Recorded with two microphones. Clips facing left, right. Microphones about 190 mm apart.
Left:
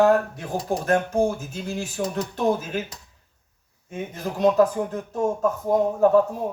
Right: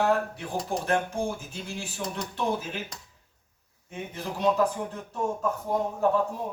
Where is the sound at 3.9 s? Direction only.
45° left (ahead or behind).